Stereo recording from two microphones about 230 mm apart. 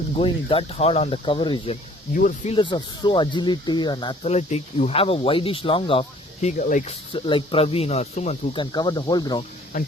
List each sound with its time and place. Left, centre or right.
0.2 s speech: left
2.1 s speech: left
7.1 s speech: left